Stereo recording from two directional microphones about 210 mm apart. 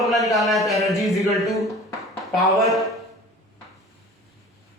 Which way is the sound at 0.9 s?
Centre (ahead or behind).